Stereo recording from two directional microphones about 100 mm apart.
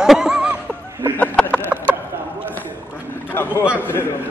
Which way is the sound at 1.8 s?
20° right (ahead or behind).